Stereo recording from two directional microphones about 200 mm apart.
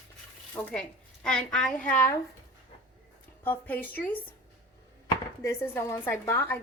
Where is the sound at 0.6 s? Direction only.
15° left (ahead or behind).